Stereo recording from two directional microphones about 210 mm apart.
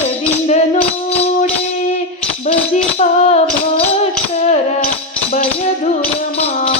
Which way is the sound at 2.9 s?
30° left (ahead or behind).